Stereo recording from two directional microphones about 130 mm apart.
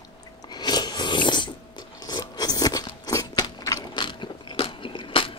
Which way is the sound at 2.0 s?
30° left (ahead or behind).